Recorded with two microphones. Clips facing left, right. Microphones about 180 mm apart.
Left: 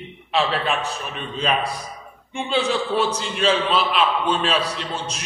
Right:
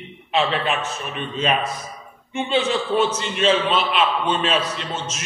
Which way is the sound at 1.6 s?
35° left (ahead or behind).